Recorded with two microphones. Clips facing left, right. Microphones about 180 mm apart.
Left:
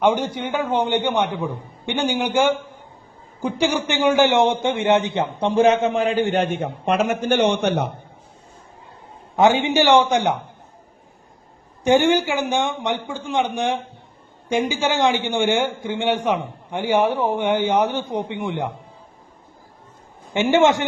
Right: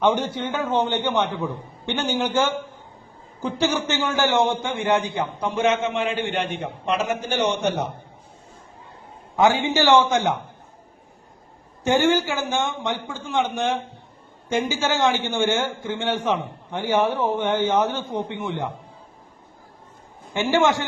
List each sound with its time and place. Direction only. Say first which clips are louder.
0.0 s a man's voice: left 2 dB; 10° left (ahead or behind); by 7.9 s 60° left (ahead or behind)
9.3 s a man's voice: left 3 dB; 20° left (ahead or behind)
11.8 s a man's voice: left 3 dB; 15° left (ahead or behind)
20.3 s a man's voice: left 4 dB; 20° left (ahead or behind)